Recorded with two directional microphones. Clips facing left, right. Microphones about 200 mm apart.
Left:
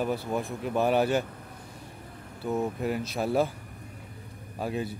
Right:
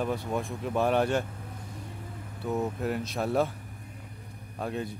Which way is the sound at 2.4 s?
Centre (ahead or behind).